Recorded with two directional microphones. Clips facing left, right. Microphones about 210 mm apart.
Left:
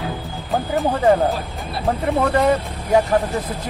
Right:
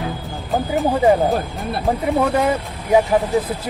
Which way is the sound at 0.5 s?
Centre (ahead or behind).